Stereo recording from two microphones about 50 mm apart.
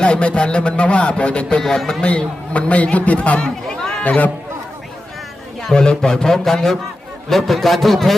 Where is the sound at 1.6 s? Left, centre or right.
Centre.